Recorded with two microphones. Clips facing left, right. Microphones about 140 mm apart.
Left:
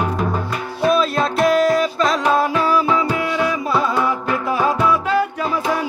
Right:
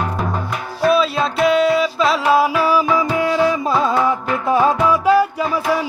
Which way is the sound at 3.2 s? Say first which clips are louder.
Right 4 dB; 30° right (ahead or behind).